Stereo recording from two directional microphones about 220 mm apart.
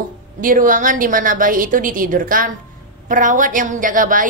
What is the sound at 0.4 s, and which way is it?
A woman's voice, 40° right (ahead or behind).